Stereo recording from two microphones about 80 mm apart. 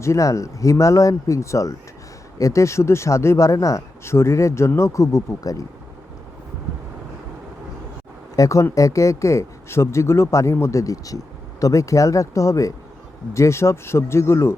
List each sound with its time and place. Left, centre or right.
0.0 s speech: left
8.4 s speech: left